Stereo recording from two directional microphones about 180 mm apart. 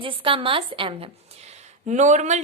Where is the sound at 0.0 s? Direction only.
30° right (ahead or behind).